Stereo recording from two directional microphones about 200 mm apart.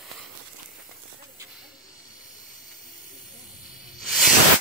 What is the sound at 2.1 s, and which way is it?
Hiss, 40° left (ahead or behind).